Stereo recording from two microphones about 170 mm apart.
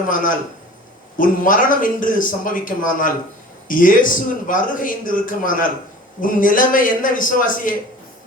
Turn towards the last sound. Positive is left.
turn(degrees=50)  # may be behind; listen again after turning